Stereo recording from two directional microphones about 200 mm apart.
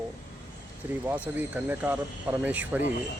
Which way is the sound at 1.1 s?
10° right (ahead or behind).